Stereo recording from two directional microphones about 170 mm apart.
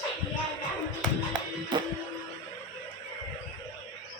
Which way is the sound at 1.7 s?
25° right (ahead or behind).